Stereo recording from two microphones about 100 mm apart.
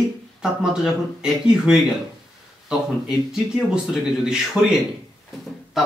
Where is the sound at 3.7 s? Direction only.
10° right (ahead or behind).